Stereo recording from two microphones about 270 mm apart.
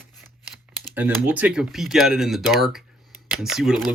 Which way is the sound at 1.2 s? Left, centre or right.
Centre.